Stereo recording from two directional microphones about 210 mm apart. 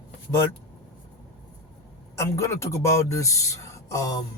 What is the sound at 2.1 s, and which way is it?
A man's voice, 15° left (ahead or behind).